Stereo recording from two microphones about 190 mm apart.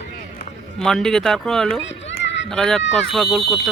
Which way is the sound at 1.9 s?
70° left (ahead or behind).